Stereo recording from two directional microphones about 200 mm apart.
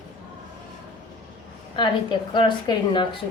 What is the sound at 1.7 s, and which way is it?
A woman's voice, 25° left (ahead or behind).